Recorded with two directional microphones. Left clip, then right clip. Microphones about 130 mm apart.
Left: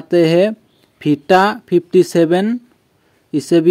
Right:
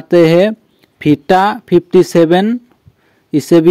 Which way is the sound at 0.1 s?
30° right (ahead or behind).